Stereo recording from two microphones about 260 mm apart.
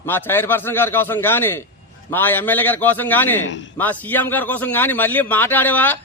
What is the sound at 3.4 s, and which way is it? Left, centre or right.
Speech, left.